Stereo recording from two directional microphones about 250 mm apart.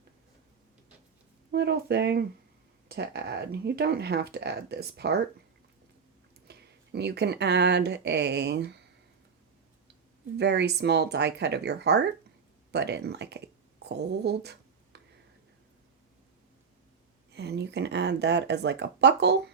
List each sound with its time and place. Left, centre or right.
1.5 s speech: right
6.5 s speech: right
10.3 s speech: right
14.9 s a sound: right
17.3 s speech: right